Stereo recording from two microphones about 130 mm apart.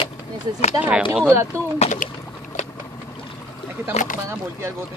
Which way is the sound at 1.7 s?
65° left (ahead or behind).